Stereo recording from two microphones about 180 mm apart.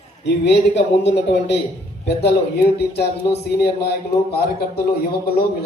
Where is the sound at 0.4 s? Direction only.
75° left (ahead or behind).